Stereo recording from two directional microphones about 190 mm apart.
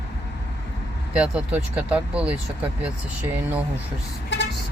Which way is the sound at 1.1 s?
5° right (ahead or behind).